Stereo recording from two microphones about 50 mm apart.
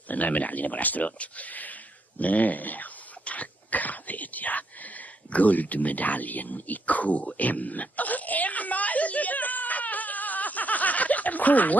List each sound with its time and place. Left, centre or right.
0.1 s speech: left
7.3 s wail: left